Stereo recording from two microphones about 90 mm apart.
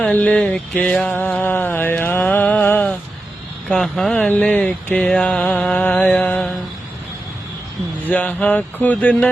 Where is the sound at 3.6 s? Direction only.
5° left (ahead or behind).